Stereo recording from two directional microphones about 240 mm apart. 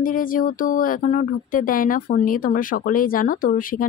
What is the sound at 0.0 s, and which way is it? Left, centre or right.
Speech, left.